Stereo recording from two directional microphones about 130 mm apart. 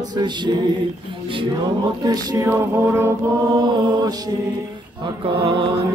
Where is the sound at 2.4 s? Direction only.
20° right (ahead or behind).